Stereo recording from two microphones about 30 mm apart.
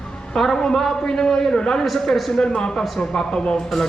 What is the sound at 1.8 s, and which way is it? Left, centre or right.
Speech, centre.